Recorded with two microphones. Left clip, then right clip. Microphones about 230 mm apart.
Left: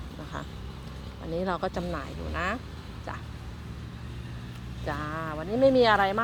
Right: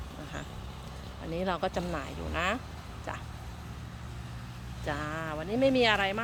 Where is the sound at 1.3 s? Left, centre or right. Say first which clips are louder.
Left 1 dB; centre.